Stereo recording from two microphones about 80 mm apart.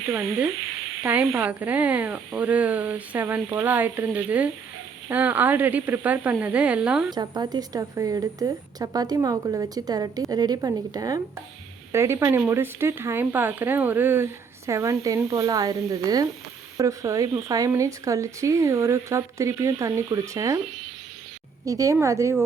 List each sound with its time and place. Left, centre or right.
1.0 s speech: centre
7.1 s a woman's voice: right
11.9 s speech: right
14.7 s a woman's voice: right
21.6 s speech: right